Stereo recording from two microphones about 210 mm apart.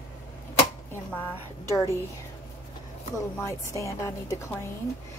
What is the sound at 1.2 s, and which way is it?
Speech, 15° left (ahead or behind).